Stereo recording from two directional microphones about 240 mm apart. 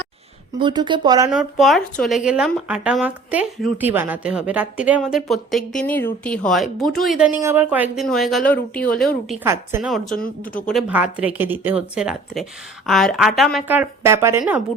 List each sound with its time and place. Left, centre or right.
0.6 s speech: centre
1.3 s speech: centre
9.4 s speech: centre